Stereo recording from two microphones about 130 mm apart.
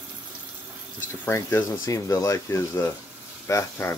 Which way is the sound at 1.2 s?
20° left (ahead or behind).